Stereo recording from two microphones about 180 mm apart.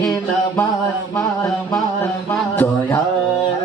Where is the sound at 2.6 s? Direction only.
15° left (ahead or behind).